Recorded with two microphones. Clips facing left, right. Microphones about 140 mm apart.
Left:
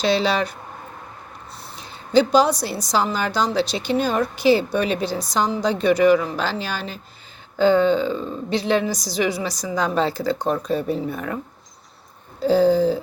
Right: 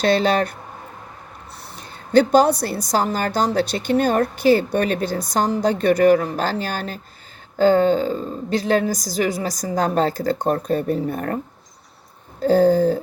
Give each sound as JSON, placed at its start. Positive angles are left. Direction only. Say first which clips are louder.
{"t": 0.0, "sound": "a woman's voice", "louder": "right 2 dB", "side_deg": -50}
{"t": 1.8, "sound": "a woman's voice", "louder": "right 2 dB", "side_deg": -55}
{"t": 12.4, "sound": "a woman's voice", "louder": "right 1 dB", "side_deg": -50}